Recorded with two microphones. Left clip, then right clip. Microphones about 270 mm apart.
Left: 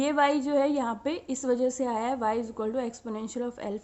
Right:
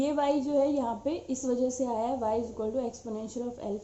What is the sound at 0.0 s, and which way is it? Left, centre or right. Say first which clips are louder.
A woman's voice: left 3 dB; left.